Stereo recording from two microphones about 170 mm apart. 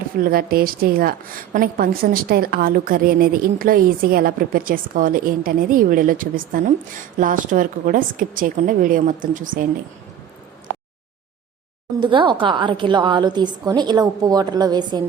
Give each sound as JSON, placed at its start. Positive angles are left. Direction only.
{"t": 0.2, "sound": "a woman's voice", "side_deg": -60}
{"t": 12.0, "sound": "a woman's voice", "side_deg": -30}